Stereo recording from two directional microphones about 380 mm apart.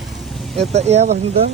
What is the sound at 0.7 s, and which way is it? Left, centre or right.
Speech, centre.